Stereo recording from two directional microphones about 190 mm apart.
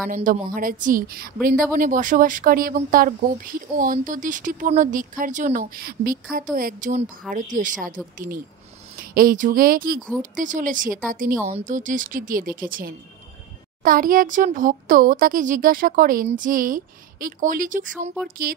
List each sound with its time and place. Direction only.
0.1 s a woman's voice: 45° right (ahead or behind)
9.0 s a woman's voice: 50° right (ahead or behind)